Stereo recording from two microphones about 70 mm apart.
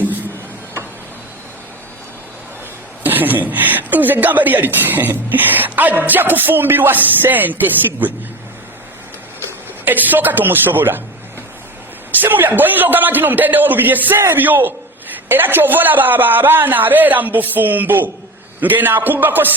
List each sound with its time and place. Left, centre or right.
3.0 s a woman's voice: right
9.8 s a woman's voice: right
12.2 s a woman's voice: right